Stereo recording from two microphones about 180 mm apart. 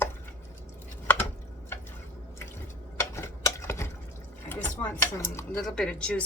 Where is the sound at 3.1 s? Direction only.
15° left (ahead or behind).